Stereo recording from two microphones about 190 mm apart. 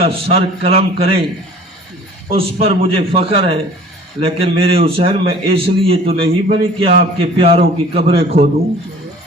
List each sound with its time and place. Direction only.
0.0 s a man's voice: 30° right (ahead or behind)
2.3 s a man's voice: 30° right (ahead or behind)